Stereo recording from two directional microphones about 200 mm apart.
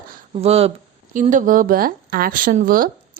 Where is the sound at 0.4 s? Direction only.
30° right (ahead or behind).